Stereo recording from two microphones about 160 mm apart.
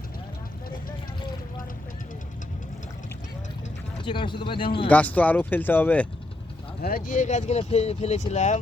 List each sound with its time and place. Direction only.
4.0 s speech: 30° left (ahead or behind)
4.9 s speech: 10° left (ahead or behind)
6.8 s speech: 65° left (ahead or behind)